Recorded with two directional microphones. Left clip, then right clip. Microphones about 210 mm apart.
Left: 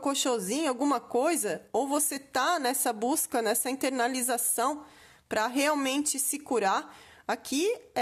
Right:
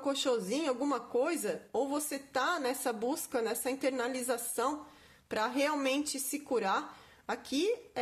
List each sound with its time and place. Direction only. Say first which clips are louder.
0.0 s a woman's voice: left 3 dB; 40° left (ahead or behind)